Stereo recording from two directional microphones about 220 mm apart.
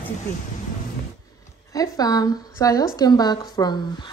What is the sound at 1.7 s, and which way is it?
Speech, 15° left (ahead or behind).